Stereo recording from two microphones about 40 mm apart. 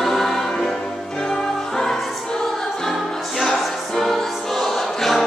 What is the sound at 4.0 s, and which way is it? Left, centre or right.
Music, centre.